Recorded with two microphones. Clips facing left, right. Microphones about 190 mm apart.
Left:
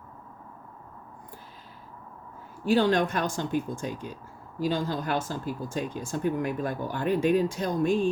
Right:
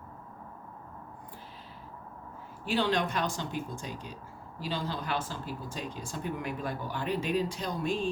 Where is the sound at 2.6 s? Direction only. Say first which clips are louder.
Left 6 dB; 45° left (ahead or behind).